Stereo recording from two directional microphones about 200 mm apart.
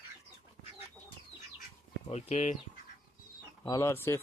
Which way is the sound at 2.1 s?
35° left (ahead or behind).